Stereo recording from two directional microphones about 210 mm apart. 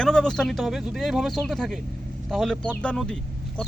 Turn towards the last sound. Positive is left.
turn(degrees=5)  # may be behind; listen again after turning